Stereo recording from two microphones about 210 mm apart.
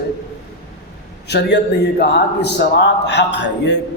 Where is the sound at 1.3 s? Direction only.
50° left (ahead or behind).